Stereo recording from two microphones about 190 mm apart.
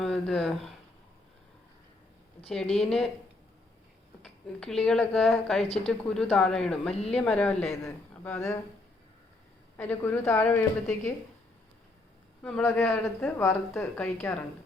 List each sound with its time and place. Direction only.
0.0 s speech: 5° left (ahead or behind)
2.8 s a woman's voice: 5° left (ahead or behind)
4.2 s a woman's voice: 5° left (ahead or behind)
5.6 s speech: 30° left (ahead or behind)
5.9 s a woman's voice: 5° left (ahead or behind)
9.7 s speech: 10° left (ahead or behind)
12.4 s speech: 5° left (ahead or behind)